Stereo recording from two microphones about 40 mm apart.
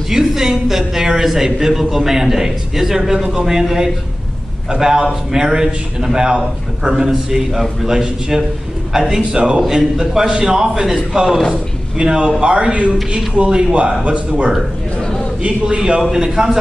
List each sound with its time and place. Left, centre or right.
0.1 s a man's voice: centre
12.0 s a man's voice: right
15.0 s a sound: centre
15.4 s a man's voice: right